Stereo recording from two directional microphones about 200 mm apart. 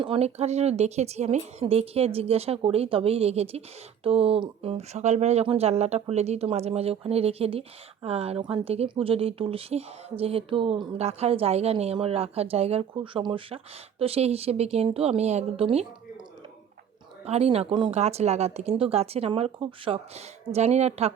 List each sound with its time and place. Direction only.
0.0 s speech: 30° right (ahead or behind)
17.2 s speech: 30° right (ahead or behind)